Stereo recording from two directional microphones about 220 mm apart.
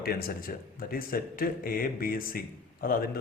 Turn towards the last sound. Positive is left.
turn(degrees=40)  # may be behind; listen again after turning